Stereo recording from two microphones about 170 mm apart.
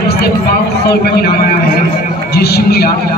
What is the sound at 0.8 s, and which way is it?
A man's voice, 70° left (ahead or behind).